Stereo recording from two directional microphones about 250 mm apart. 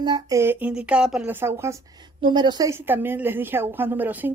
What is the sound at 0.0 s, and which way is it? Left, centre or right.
A woman's voice, centre.